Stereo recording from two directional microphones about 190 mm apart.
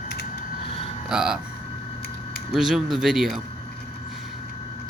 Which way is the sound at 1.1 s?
5° right (ahead or behind).